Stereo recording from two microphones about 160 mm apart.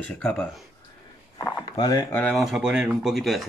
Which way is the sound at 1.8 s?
25° left (ahead or behind).